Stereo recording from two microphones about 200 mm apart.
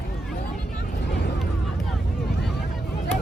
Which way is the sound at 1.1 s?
55° left (ahead or behind).